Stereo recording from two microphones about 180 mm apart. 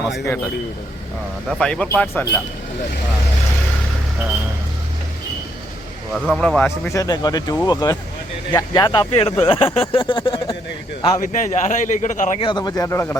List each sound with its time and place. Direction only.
1.5 s speech: 5° left (ahead or behind)
6.1 s speech: centre (ahead or behind); by 10.5 s 30° left (ahead or behind)
11.2 s a man's voice: 45° left (ahead or behind)
12.4 s speech: 25° left (ahead or behind)